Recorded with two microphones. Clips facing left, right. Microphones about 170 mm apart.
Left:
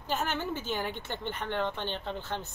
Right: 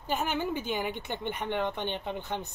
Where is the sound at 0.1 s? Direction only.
10° right (ahead or behind).